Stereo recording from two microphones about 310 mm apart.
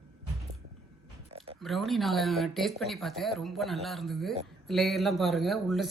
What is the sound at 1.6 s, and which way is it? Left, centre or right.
A man's voice, centre.